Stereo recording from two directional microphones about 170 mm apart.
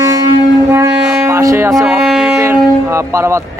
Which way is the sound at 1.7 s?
5° right (ahead or behind).